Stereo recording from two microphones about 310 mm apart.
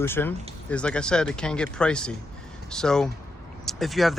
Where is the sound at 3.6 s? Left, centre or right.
Centre.